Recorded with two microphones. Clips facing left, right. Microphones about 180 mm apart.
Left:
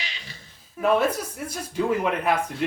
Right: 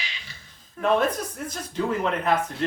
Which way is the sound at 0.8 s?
10° left (ahead or behind).